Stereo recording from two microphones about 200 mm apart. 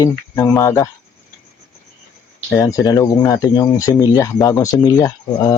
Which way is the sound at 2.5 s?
15° left (ahead or behind).